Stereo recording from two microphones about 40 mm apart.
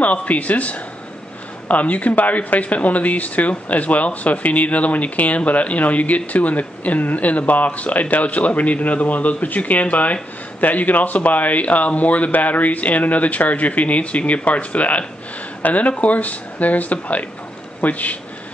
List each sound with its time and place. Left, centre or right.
0.0 s speech: left